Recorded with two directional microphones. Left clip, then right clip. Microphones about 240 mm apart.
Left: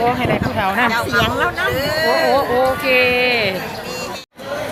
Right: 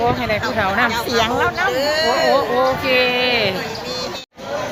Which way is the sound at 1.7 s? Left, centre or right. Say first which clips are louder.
Even; centre.